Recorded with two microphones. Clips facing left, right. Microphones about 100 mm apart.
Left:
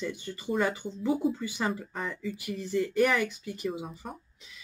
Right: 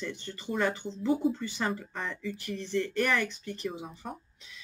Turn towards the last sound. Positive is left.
turn(degrees=5)  # may be behind; listen again after turning